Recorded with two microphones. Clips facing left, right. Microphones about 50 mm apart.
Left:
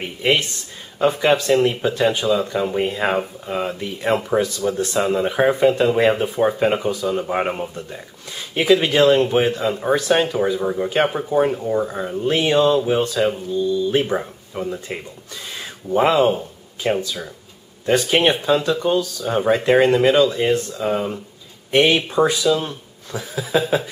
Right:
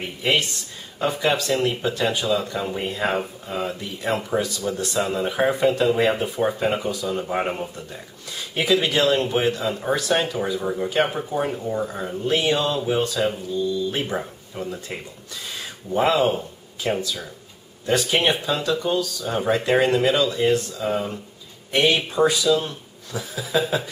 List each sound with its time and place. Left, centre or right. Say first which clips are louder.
0.2 s speech: left 3 dB; centre
4.1 s speech: left 5 dB; left
4.7 s speech: left 4 dB; left
12.3 s speech: left 5 dB; left
16.1 s speech: left 3 dB; centre
16.8 s speech: left 3 dB; left; by 23.2 s centre
23.5 s speech: left 3 dB; left